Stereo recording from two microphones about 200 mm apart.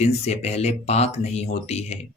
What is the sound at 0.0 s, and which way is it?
Speech, 35° left (ahead or behind).